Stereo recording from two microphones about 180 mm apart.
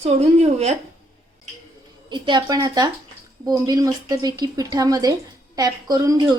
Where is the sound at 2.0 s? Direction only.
25° right (ahead or behind).